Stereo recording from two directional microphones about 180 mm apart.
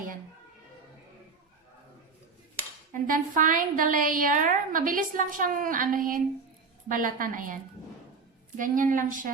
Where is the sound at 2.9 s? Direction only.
50° right (ahead or behind).